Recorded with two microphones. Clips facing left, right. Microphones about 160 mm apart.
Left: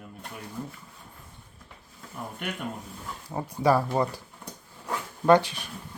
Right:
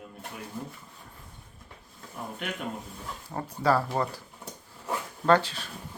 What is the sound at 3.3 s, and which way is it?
Speech, 10° left (ahead or behind).